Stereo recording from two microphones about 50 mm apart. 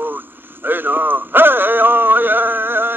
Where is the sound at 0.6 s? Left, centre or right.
Right.